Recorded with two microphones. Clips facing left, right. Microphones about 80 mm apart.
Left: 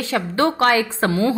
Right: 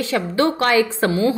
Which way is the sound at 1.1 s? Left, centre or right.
Left.